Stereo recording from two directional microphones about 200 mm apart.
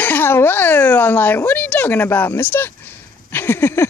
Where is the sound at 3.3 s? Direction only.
10° left (ahead or behind).